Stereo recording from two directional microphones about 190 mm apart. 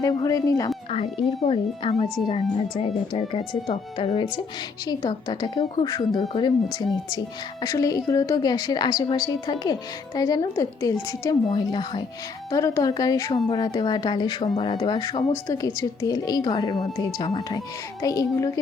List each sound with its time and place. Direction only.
0.0 s a woman's voice: 20° left (ahead or behind)
1.4 s a woman's voice: 30° left (ahead or behind)
6.1 s speech: 30° left (ahead or behind)
6.7 s a woman's voice: 20° left (ahead or behind)